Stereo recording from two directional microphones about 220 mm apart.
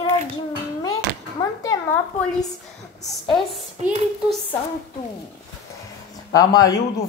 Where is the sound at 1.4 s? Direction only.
15° left (ahead or behind).